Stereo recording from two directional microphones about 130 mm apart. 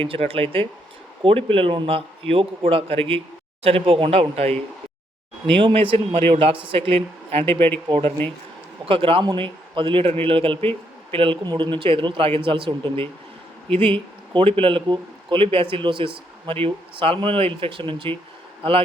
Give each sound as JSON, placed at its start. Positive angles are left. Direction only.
{"t": 0.0, "sound": "speech", "side_deg": -45}
{"t": 5.5, "sound": "speech", "side_deg": -40}